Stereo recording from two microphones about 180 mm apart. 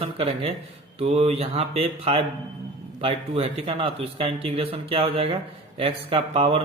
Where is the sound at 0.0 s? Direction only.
35° right (ahead or behind).